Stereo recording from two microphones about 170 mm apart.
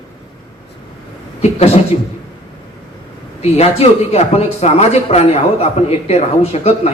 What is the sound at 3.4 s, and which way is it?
A man's voice, 40° left (ahead or behind).